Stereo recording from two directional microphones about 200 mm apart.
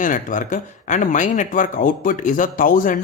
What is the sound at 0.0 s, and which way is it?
Speech, 40° left (ahead or behind).